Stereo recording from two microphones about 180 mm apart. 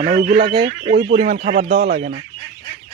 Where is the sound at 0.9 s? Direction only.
60° right (ahead or behind).